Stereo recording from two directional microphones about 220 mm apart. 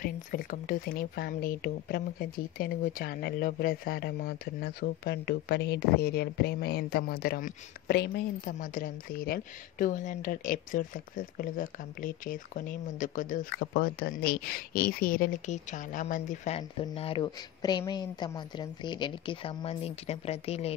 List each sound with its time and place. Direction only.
0.0 s speech: 40° left (ahead or behind)